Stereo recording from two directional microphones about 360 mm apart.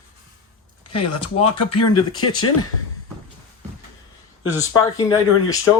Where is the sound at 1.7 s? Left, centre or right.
Centre.